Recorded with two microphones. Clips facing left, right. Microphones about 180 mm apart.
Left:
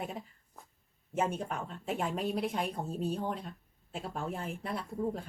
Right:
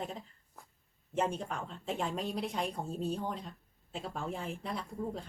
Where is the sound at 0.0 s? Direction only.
10° left (ahead or behind).